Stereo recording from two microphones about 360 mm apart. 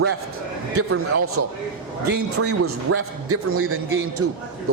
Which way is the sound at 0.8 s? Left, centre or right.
Right.